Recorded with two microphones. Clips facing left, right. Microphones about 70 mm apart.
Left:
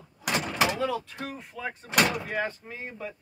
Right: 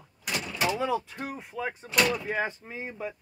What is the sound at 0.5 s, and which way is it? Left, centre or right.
Door, left.